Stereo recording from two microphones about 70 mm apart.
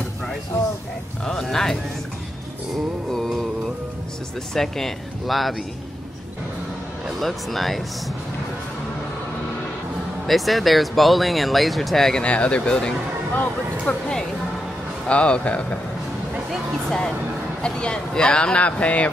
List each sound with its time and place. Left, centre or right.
1.2 s speech: centre
3.1 s music: centre
4.6 s speech: centre
7.2 s speech: centre
10.2 s speech: centre
12.3 s speech: centre
15.0 s speech: centre
17.6 s speech: centre